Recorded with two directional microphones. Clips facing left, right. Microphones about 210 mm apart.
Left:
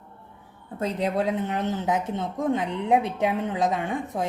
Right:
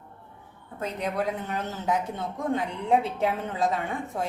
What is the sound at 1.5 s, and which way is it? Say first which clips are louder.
A woman's voice: left 3 dB; 20° left (ahead or behind).